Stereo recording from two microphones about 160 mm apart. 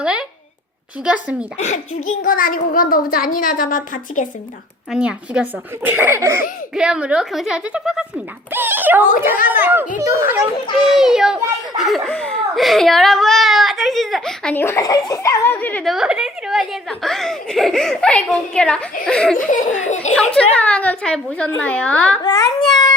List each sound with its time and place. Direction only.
0.0 s a sound: 5° right (ahead or behind)
1.0 s a child's voice: 5° right (ahead or behind)
1.5 s laughter: 50° left (ahead or behind)
2.2 s a woman's voice: 60° left (ahead or behind)
4.9 s a child's voice: 5° right (ahead or behind)
6.7 s a child's voice: 5° right (ahead or behind)
10.8 s speech: 5° right (ahead or behind)
14.5 s speech: 15° left (ahead or behind)
15.9 s speech: 5° right (ahead or behind)
19.5 s laughter: 50° left (ahead or behind)
20.3 s speech: 10° left (ahead or behind)
22.2 s a child's voice: 25° left (ahead or behind)